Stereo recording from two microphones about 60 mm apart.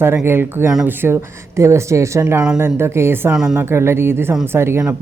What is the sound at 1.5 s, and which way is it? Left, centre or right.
Speech, right.